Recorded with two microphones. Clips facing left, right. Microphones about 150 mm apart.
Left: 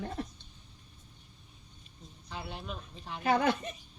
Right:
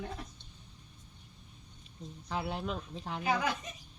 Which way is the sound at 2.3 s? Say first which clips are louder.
Right 6 dB; 75° right (ahead or behind).